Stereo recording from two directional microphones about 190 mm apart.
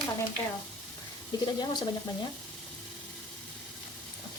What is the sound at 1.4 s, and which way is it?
Speech, 25° left (ahead or behind).